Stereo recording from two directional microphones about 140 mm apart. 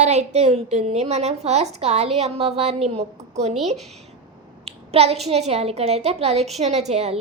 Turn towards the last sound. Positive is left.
turn(degrees=-50)  # may be behind; listen again after turning